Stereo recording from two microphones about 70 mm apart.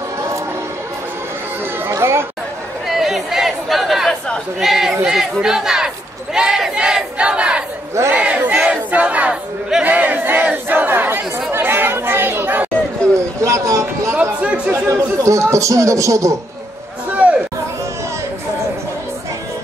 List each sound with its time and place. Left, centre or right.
1.9 s chatter: right
2.9 s chatter: centre
4.6 s speech: centre
6.3 s battle cry: centre
9.8 s crowd: right
11.5 s speech: right
13.4 s a sound: right
14.7 s speech: right
17.1 s a sound: centre